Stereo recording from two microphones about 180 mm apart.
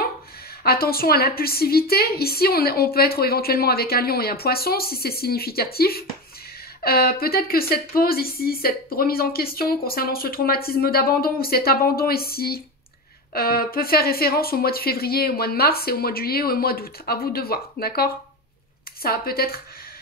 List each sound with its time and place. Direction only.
0.7 s speech: 55° left (ahead or behind)